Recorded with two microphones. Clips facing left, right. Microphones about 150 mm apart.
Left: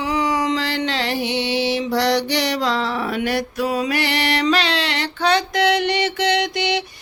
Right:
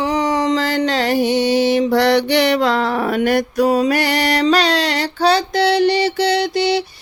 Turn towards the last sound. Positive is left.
turn(degrees=-35)  # may be behind; listen again after turning